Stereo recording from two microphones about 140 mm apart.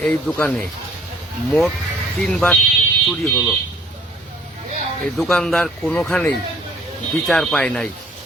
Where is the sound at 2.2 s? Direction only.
5° left (ahead or behind).